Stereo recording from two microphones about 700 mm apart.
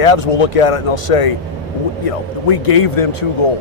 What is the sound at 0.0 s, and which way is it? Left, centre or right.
A man's voice, left.